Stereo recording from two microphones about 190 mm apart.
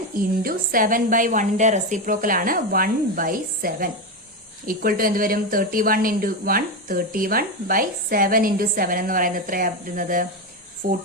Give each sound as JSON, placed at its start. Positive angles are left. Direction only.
{"t": 0.2, "sound": "speech", "side_deg": -50}